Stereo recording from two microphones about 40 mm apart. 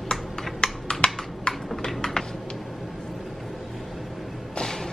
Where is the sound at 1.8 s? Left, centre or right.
Centre.